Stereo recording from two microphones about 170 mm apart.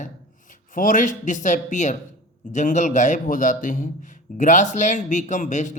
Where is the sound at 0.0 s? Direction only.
50° left (ahead or behind).